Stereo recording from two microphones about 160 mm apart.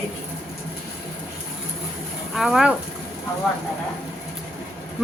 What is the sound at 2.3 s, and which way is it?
Speech, centre (ahead or behind).